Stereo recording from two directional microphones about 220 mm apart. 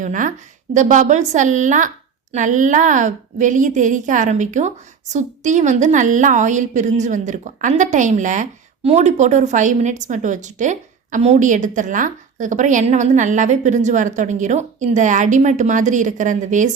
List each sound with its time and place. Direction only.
0.0 s a woman's voice: 35° right (ahead or behind)